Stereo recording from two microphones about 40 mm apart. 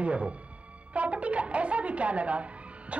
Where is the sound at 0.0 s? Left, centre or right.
Right.